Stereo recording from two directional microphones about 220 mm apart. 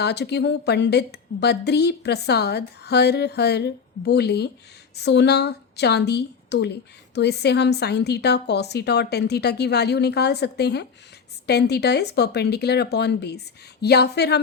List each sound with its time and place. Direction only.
0.0 s a woman's voice: 50° left (ahead or behind)